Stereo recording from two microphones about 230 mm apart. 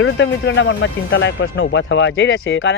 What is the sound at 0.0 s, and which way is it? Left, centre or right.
Speech, left.